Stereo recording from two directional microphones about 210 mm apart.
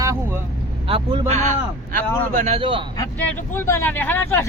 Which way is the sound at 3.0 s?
10° left (ahead or behind).